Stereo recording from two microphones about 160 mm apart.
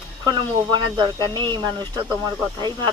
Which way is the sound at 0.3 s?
25° right (ahead or behind).